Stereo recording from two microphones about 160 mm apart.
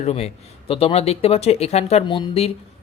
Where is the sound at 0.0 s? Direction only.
40° left (ahead or behind).